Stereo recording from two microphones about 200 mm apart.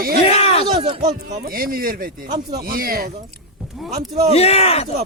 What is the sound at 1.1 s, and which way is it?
Speech, 45° right (ahead or behind).